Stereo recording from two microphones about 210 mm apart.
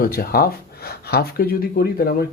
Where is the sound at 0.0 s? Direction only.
45° left (ahead or behind).